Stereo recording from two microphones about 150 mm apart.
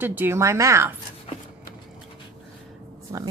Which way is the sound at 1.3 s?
40° left (ahead or behind).